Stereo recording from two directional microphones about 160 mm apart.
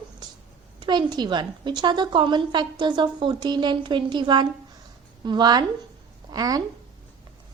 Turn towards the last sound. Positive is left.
turn(degrees=-25)  # may be behind; listen again after turning